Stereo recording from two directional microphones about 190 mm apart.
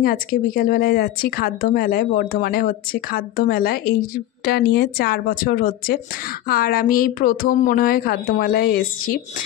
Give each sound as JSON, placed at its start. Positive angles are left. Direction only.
{"t": 0.0, "sound": "speech", "side_deg": 50}